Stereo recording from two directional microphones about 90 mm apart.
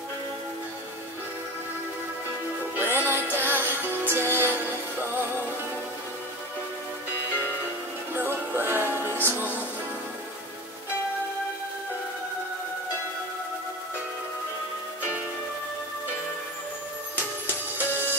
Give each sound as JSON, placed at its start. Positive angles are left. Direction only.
{"t": 2.7, "sound": "music", "side_deg": -25}
{"t": 8.2, "sound": "music", "side_deg": -25}
{"t": 17.7, "sound": "music", "side_deg": -20}